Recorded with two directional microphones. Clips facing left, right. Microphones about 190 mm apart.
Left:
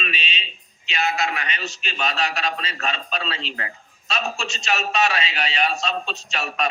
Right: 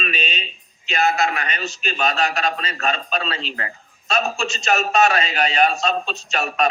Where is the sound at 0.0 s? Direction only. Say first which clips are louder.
Right 4 dB; 45° right (ahead or behind).